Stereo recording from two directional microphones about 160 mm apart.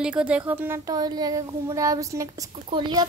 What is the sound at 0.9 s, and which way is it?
A woman's voice, 25° right (ahead or behind).